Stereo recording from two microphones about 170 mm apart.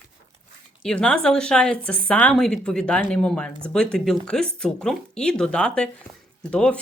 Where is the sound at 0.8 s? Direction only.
5° left (ahead or behind).